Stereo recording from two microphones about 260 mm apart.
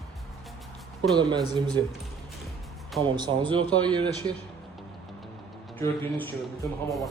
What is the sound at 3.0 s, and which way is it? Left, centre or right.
Speech, centre.